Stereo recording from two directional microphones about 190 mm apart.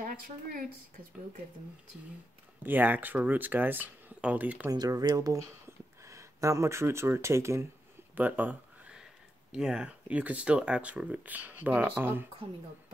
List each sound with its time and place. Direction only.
0.0 s speech: 50° right (ahead or behind)
2.6 s speech: 10° right (ahead or behind)
4.7 s speech: 20° right (ahead or behind)
8.1 s a sound: 10° right (ahead or behind)
9.5 s speech: 5° right (ahead or behind)